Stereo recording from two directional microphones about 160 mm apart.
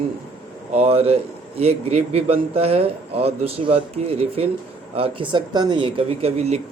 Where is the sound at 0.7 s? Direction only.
40° right (ahead or behind).